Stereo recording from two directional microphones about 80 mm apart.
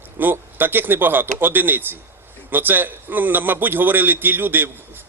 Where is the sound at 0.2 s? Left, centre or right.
Right.